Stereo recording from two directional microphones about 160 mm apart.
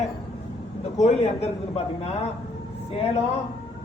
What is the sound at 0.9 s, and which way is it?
A man's voice, 45° left (ahead or behind).